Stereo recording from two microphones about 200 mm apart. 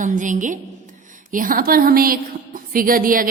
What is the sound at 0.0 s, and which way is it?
Speech, 40° right (ahead or behind).